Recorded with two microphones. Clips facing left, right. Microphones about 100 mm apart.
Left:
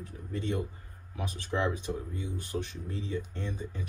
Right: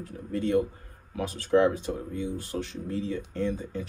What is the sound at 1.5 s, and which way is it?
Speech, 15° right (ahead or behind).